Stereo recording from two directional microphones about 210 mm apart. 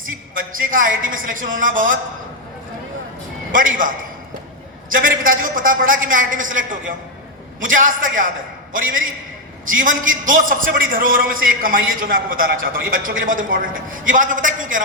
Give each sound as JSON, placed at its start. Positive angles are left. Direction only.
{"t": 0.3, "sound": "a woman's voice", "side_deg": -40}
{"t": 3.5, "sound": "a woman's voice", "side_deg": -40}
{"t": 9.9, "sound": "a man's voice", "side_deg": -70}
{"t": 10.2, "sound": "a woman's voice", "side_deg": -40}